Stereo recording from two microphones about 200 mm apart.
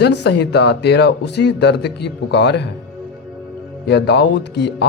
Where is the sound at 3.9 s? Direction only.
55° left (ahead or behind).